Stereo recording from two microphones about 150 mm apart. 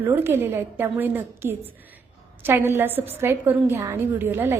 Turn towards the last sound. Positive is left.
turn(degrees=-15)  # may be behind; listen again after turning